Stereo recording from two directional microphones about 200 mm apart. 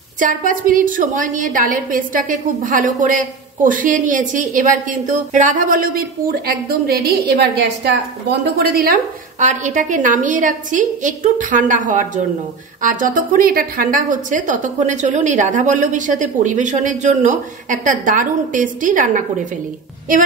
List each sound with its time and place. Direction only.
0.2 s a woman's voice: 40° right (ahead or behind)